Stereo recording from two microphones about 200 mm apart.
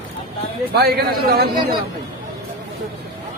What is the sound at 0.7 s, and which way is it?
Speech, 50° right (ahead or behind).